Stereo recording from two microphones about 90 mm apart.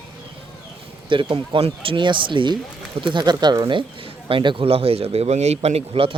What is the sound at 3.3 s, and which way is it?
A man's voice, 55° right (ahead or behind).